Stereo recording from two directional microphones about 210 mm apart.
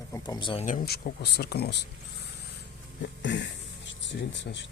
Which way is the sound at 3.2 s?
60° left (ahead or behind).